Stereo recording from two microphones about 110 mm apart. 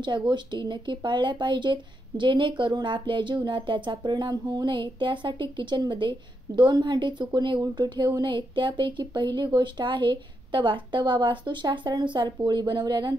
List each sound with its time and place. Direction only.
0.0 s speech: 45° right (ahead or behind)